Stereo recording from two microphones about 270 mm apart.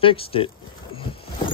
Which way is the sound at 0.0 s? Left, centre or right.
Left.